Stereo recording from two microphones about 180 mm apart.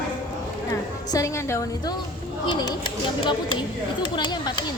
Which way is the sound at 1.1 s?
20° left (ahead or behind).